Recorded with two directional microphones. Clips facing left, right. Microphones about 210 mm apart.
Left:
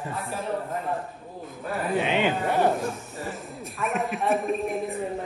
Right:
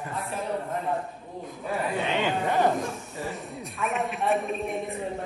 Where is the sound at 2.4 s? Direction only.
5° left (ahead or behind).